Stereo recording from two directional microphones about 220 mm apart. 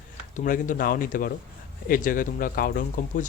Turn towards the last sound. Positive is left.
turn(degrees=40)  # may be behind; listen again after turning